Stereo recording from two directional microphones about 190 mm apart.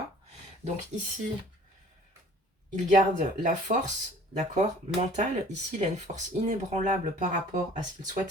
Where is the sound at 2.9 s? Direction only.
40° right (ahead or behind).